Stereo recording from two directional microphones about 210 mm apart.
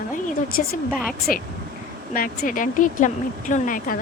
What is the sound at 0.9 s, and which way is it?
Speech, centre (ahead or behind).